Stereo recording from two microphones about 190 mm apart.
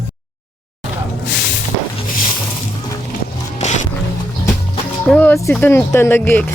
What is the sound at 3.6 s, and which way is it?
Music, 40° left (ahead or behind).